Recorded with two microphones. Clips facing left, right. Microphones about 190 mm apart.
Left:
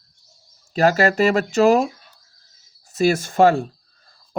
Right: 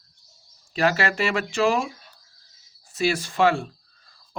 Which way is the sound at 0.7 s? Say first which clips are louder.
Left 6 dB; 40° left (ahead or behind).